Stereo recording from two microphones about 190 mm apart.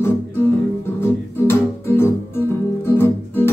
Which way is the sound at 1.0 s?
10° left (ahead or behind).